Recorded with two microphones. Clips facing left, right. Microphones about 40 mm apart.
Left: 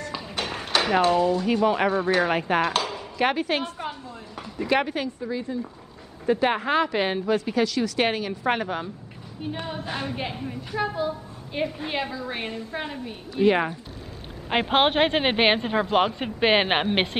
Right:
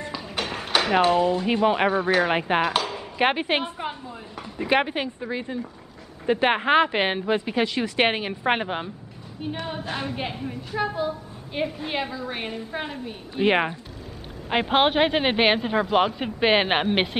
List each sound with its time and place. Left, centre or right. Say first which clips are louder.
0.4 s speech: right 1 dB; centre; by 2.0 s right
2.0 s speech: right 1 dB; centre
2.3 s a woman's voice: right 1 dB; right
2.6 s chopping: right 1 dB; centre
3.2 s a woman's voice: right 1 dB; right
9.7 s a woman's voice: right 1 dB; centre
13.3 s a woman's voice: left 1 dB; right
14.5 s a woman's voice: even; centre